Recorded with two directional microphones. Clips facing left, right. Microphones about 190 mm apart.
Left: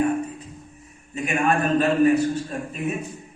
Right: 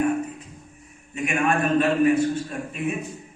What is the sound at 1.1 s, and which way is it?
A man's voice, 35° left (ahead or behind).